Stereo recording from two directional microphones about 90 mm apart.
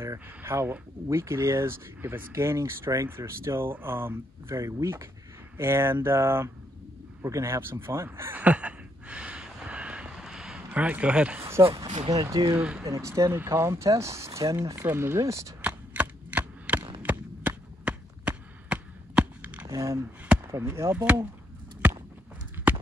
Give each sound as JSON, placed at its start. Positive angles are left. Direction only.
{"t": 0.4, "sound": "speech", "side_deg": -25}
{"t": 8.4, "sound": "a sound", "side_deg": -15}
{"t": 12.1, "sound": "speech", "side_deg": -50}
{"t": 12.5, "sound": "speech", "side_deg": -15}
{"t": 12.8, "sound": "speech", "side_deg": -35}
{"t": 14.8, "sound": "speech", "side_deg": -25}
{"t": 15.6, "sound": "a sound", "side_deg": -15}
{"t": 19.6, "sound": "speech", "side_deg": -40}